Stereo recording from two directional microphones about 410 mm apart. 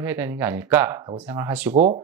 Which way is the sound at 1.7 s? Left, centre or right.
Centre.